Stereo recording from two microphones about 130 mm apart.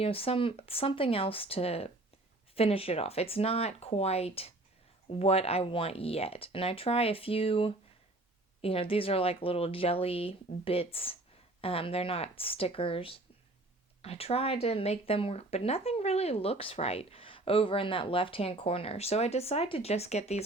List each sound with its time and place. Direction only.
0.0 s speech: 45° left (ahead or behind)